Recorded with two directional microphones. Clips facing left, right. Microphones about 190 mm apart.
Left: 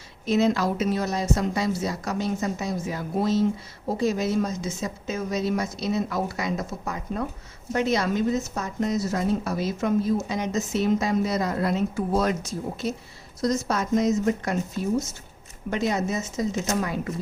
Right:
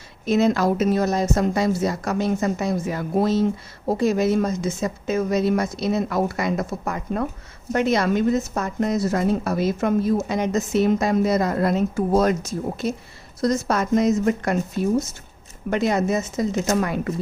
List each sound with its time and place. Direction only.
0.3 s a woman's voice: 50° right (ahead or behind)
15.7 s a woman's voice: 60° right (ahead or behind)